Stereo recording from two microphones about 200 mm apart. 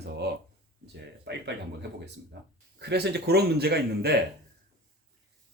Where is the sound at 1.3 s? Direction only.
60° right (ahead or behind).